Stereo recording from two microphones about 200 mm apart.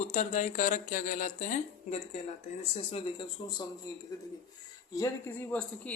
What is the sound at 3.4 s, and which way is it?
Speech, 25° left (ahead or behind).